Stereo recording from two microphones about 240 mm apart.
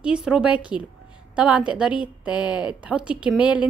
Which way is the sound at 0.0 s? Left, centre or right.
Centre.